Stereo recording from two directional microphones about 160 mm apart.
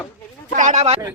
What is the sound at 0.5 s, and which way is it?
Speech, 50° right (ahead or behind).